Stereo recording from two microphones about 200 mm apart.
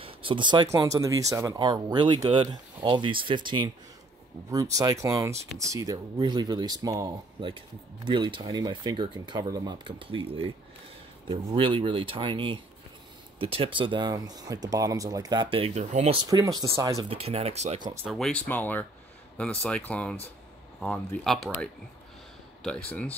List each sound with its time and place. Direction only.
0.0 s speech: 25° right (ahead or behind)
4.7 s speech: 15° right (ahead or behind)
17.1 s speech: 30° right (ahead or behind)
17.9 s speech: centre (ahead or behind)